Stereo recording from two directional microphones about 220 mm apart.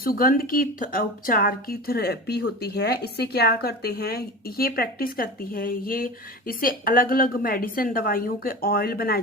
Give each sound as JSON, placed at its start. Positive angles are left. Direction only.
{"t": 0.0, "sound": "a woman's voice", "side_deg": 40}